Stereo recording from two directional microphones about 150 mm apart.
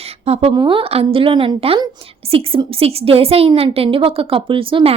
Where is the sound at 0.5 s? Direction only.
30° right (ahead or behind).